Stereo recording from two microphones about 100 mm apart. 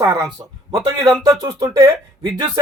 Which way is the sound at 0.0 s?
40° right (ahead or behind).